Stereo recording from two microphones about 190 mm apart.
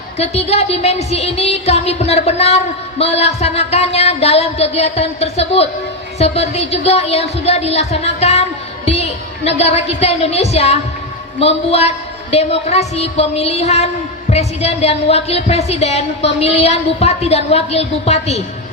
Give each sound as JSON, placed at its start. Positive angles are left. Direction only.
{"t": 0.2, "sound": "a woman's voice", "side_deg": 35}